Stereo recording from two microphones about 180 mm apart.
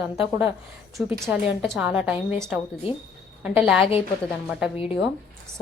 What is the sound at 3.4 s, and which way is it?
Speech, 5° right (ahead or behind).